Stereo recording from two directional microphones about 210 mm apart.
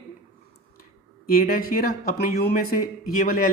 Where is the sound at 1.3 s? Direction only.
45° left (ahead or behind).